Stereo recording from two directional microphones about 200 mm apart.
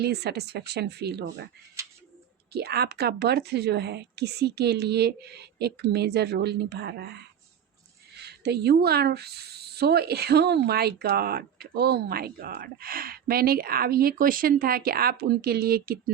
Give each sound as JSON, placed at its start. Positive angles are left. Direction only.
{"t": 0.0, "sound": "a woman's voice", "side_deg": -55}
{"t": 2.5, "sound": "a woman's voice", "side_deg": -55}